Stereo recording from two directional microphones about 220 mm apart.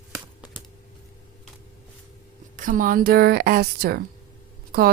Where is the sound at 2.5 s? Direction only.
35° right (ahead or behind).